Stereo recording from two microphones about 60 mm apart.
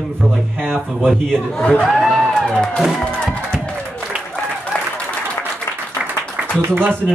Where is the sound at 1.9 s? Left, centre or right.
Centre.